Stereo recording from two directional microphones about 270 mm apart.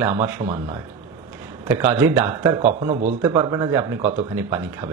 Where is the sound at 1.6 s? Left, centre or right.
Centre.